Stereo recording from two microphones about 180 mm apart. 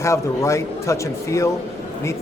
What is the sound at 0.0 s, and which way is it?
Speech, 15° left (ahead or behind).